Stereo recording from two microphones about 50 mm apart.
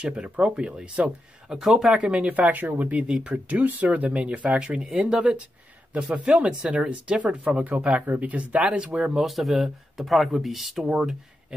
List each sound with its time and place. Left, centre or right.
0.0 s speech: centre
1.0 s speech: centre
2.0 s speech: right
9.1 s speech: centre
10.9 s speech: centre